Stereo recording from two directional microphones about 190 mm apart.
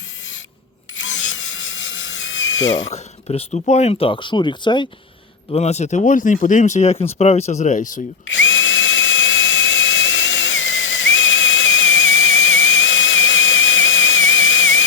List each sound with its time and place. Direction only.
0.9 s a sound: 80° left
2.9 s speech: 35° left (ahead or behind)
8.3 s drill: 80° left